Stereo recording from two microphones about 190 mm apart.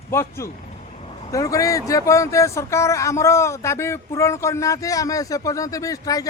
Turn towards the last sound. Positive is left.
turn(degrees=20)  # may be behind; listen again after turning